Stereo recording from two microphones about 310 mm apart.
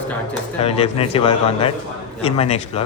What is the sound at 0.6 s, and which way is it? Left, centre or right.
A man's voice, centre.